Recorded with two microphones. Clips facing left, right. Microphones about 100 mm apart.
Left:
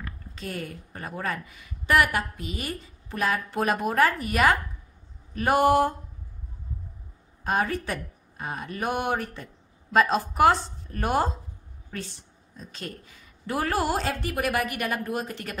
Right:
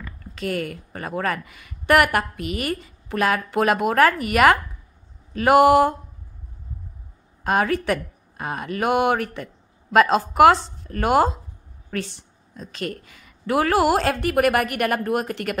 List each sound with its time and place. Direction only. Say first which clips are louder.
0.3 s a woman's voice: right 9 dB; 80° right
7.4 s speech: right 6 dB; 90° right
11.9 s a woman's voice: right 8 dB; 80° right